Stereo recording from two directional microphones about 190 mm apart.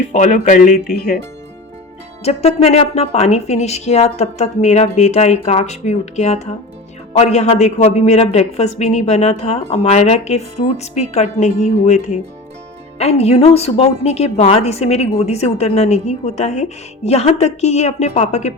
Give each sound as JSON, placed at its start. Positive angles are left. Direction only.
{"t": 0.1, "sound": "speech", "side_deg": 40}
{"t": 2.2, "sound": "a man's voice", "side_deg": 35}